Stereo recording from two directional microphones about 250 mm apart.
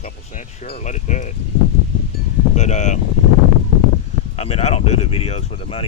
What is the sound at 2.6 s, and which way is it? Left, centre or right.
Speech, left.